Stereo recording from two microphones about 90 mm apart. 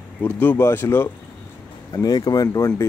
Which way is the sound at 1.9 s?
45° left (ahead or behind).